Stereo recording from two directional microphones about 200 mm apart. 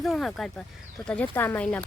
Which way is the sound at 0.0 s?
Centre (ahead or behind).